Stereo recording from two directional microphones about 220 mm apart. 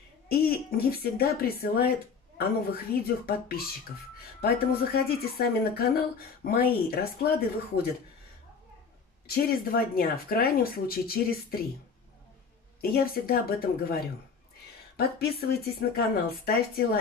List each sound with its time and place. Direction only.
0.3 s a sound: 45° left (ahead or behind)
1.0 s speech: 45° left (ahead or behind)
9.3 s speech: 40° left (ahead or behind)
12.8 s speech: 45° left (ahead or behind)